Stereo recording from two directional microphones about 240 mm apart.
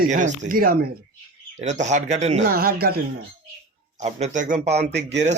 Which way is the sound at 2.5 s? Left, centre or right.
Right.